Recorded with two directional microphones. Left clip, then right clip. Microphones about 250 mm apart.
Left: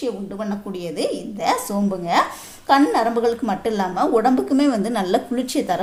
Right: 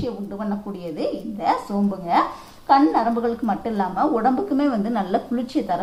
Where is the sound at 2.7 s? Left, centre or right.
Left.